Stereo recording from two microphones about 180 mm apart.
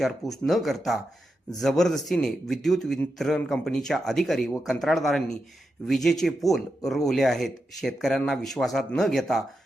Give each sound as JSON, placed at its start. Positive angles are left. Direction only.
{"t": 0.0, "sound": "speech", "side_deg": 0}